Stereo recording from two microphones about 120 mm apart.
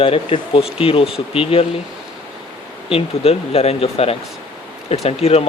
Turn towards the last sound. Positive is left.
turn(degrees=60)  # may be behind; listen again after turning